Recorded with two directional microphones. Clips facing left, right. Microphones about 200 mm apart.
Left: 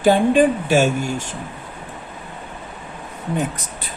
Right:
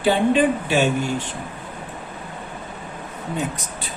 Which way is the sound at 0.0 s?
45° left (ahead or behind).